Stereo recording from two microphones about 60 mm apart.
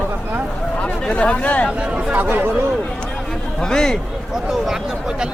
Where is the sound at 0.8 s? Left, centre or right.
Centre.